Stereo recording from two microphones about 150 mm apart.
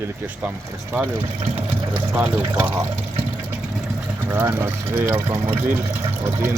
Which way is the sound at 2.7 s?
20° right (ahead or behind).